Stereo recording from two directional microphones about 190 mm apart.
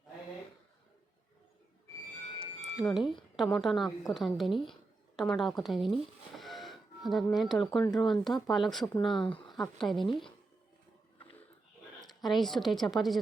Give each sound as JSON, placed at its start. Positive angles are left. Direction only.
{"t": 2.4, "sound": "music", "side_deg": 5}
{"t": 3.1, "sound": "a woman's voice", "side_deg": 0}
{"t": 6.3, "sound": "music", "side_deg": 0}
{"t": 7.9, "sound": "a woman's voice", "side_deg": 0}
{"t": 9.1, "sound": "speech", "side_deg": 25}
{"t": 9.5, "sound": "speech", "side_deg": 0}
{"t": 12.0, "sound": "a woman's voice", "side_deg": 0}